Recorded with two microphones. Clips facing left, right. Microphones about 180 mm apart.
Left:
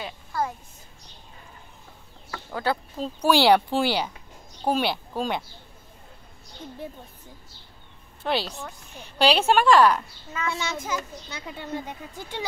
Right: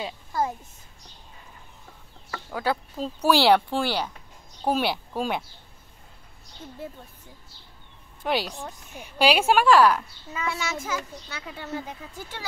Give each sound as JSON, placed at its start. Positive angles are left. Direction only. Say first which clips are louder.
{"t": 0.0, "sound": "a sound", "louder": "right 1 dB", "side_deg": -20}
{"t": 2.3, "sound": "speech", "louder": "even", "side_deg": -5}
{"t": 4.6, "sound": "a woman's voice", "louder": "even", "side_deg": -5}
{"t": 8.2, "sound": "a woman's voice", "louder": "even", "side_deg": -10}
{"t": 10.6, "sound": "speech", "louder": "left 1 dB", "side_deg": 15}